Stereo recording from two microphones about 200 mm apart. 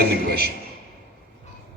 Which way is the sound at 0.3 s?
50° right (ahead or behind).